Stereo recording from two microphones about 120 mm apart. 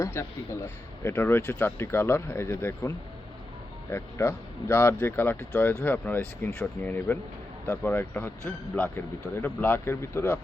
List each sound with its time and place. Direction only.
0.0 s speech: 20° left (ahead or behind)
3.9 s speech: 20° left (ahead or behind)